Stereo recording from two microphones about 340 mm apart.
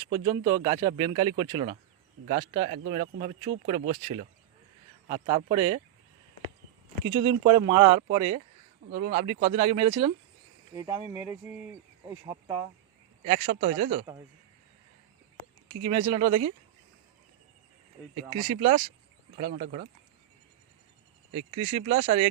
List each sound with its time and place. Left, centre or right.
0.0 s speech: centre
7.3 s speech: centre
15.9 s speech: centre
18.3 s speech: centre
21.3 s speech: centre